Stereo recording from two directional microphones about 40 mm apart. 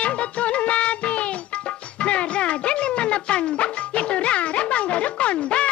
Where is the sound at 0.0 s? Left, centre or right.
Left.